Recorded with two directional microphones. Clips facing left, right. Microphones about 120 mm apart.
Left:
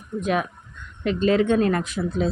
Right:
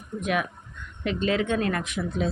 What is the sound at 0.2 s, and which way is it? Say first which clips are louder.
Speech: left 3 dB; 35° left (ahead or behind).